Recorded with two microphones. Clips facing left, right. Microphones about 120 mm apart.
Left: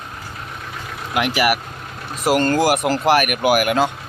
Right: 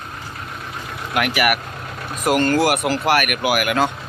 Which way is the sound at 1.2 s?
25° left (ahead or behind).